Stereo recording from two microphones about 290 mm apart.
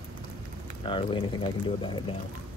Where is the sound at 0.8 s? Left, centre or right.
Centre.